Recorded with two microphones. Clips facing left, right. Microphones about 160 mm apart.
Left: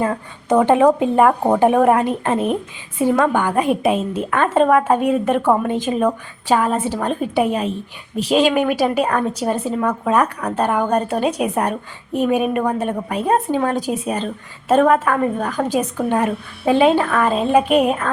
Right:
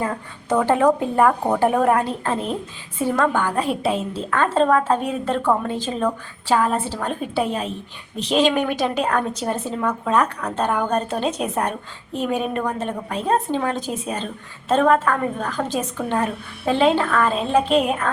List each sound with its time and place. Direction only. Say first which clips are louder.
0.4 s a woman's voice: left 4 dB; 20° left (ahead or behind)